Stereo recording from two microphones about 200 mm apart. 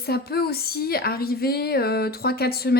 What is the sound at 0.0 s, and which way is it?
A woman's voice, 50° left (ahead or behind).